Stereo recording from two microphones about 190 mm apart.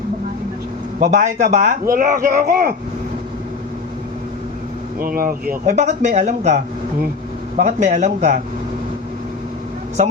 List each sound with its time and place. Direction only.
0.9 s a man's voice: 40° right (ahead or behind)
4.9 s a man's voice: 50° right (ahead or behind)